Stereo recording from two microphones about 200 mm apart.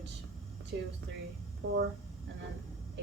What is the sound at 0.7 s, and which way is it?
Speech, 55° right (ahead or behind).